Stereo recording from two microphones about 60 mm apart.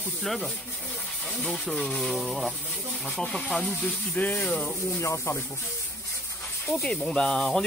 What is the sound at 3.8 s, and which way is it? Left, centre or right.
Speech, left.